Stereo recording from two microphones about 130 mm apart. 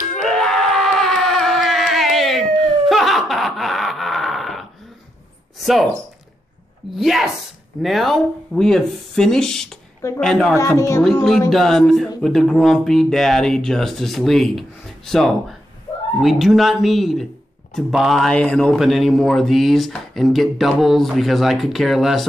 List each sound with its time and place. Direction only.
0.1 s a sound: 5° left (ahead or behind)
7.0 s a man's voice: centre (ahead or behind)
10.7 s speech: 20° left (ahead or behind)
11.5 s a man's voice: 5° left (ahead or behind)